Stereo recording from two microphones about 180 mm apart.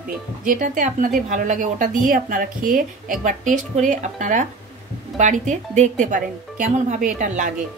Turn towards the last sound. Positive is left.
turn(degrees=-45)  # may be behind; listen again after turning